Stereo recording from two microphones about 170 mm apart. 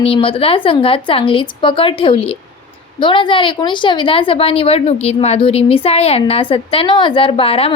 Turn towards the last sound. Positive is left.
turn(degrees=35)  # may be behind; listen again after turning